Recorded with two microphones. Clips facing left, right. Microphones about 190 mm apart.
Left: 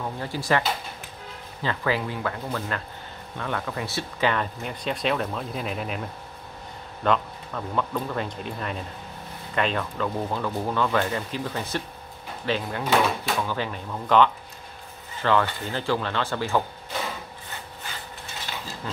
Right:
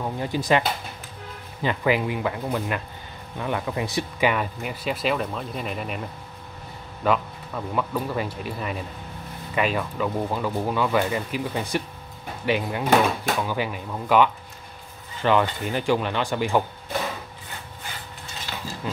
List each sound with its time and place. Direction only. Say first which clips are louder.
0.0 s speech: right 4 dB; 20° right (ahead or behind)